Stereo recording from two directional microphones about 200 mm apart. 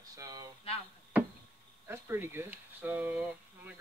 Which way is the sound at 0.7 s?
30° left (ahead or behind).